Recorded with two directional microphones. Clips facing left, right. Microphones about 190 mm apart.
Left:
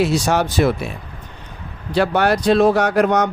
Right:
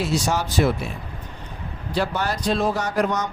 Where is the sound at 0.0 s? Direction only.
65° left (ahead or behind).